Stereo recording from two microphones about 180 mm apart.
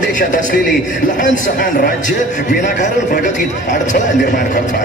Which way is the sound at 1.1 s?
45° left (ahead or behind).